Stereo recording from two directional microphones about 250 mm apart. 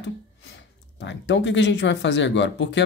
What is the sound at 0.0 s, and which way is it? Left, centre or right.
Speech, left.